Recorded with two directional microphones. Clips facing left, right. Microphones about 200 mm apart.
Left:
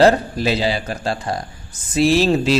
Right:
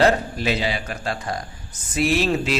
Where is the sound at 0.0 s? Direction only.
35° left (ahead or behind).